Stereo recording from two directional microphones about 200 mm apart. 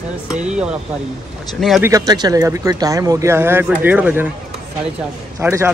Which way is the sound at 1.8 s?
15° right (ahead or behind).